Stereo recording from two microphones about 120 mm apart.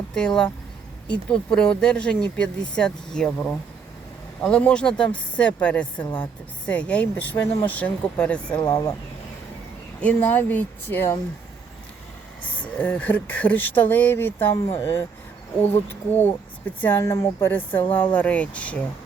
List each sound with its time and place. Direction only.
0.1 s speech: 5° left (ahead or behind)
8.6 s speech: 30° left (ahead or behind)
10.0 s speech: 10° left (ahead or behind)
12.4 s speech: 10° left (ahead or behind)
17.5 s speech: 15° left (ahead or behind)